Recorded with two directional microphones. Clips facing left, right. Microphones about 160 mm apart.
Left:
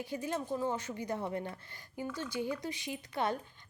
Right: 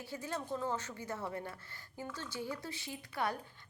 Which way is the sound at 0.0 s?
15° left (ahead or behind).